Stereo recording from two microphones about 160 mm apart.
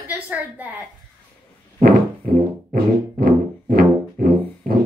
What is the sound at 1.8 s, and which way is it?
Music, 65° right (ahead or behind).